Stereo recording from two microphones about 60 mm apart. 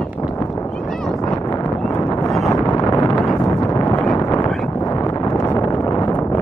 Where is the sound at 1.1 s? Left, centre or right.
Left.